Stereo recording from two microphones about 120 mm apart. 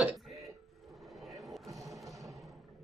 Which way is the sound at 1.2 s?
Centre (ahead or behind).